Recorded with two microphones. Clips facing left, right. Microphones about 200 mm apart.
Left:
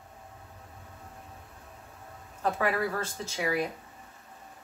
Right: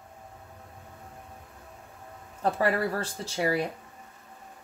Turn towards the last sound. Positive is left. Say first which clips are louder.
# right 2 dB
turn(degrees=-35)  # may be behind; listen again after turning